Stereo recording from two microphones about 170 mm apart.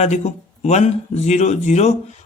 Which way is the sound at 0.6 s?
40° left (ahead or behind).